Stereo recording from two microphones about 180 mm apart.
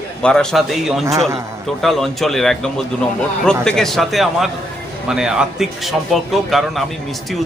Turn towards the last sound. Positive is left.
turn(degrees=0)  # may be behind; listen again after turning